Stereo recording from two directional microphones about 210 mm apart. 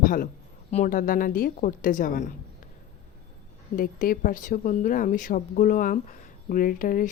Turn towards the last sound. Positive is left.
turn(degrees=40)  # may be behind; listen again after turning